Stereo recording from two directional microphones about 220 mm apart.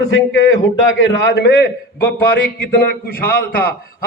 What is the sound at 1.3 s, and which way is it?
A man's voice, 50° left (ahead or behind).